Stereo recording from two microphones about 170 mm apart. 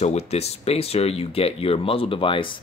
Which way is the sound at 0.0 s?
40° left (ahead or behind).